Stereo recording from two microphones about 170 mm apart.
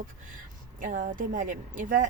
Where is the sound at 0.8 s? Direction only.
50° right (ahead or behind).